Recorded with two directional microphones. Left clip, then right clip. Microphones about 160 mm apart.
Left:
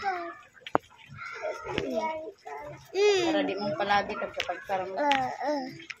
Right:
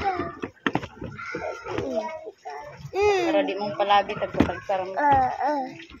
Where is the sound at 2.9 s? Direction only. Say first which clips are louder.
Right 3 dB; 25° left (ahead or behind).